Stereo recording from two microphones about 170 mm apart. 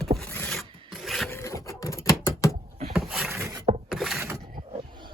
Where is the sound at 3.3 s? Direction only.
15° right (ahead or behind).